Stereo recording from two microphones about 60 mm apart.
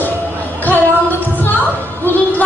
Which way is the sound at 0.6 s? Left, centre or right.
Left.